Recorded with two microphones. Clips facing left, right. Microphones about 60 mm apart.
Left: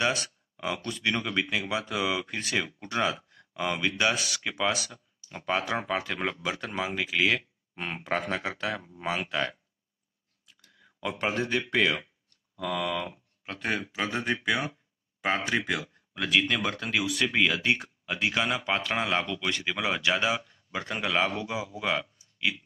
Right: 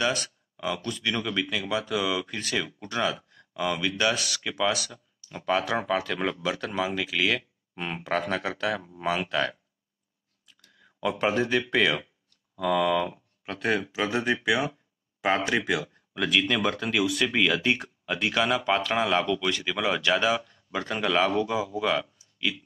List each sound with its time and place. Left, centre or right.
0.0 s speech: left
10.4 s a sound: centre
11.6 s speech: centre